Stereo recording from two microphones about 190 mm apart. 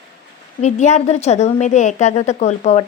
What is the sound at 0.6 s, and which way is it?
A woman's voice, 35° left (ahead or behind).